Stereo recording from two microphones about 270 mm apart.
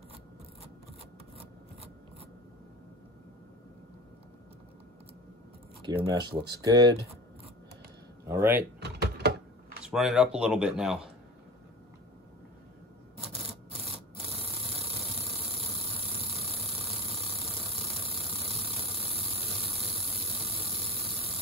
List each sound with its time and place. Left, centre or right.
5.8 s speech: centre
8.3 s speech: centre
8.7 s typing: right
9.8 s speech: centre
13.3 s rub: right
18.0 s ratchet: right